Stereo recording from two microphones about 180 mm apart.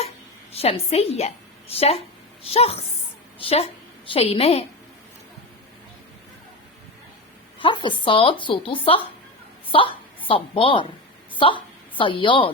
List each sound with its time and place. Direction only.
0.5 s a woman's voice: 35° left (ahead or behind)
7.6 s a woman's voice: 25° left (ahead or behind)